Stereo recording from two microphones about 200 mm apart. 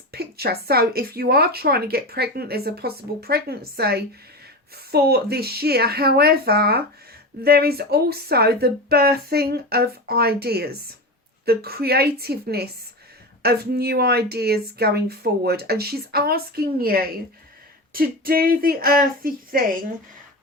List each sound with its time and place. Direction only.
0.1 s a woman's voice: 50° right (ahead or behind)